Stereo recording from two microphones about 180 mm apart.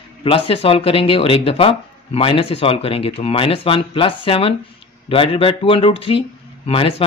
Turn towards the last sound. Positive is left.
turn(degrees=30)  # may be behind; listen again after turning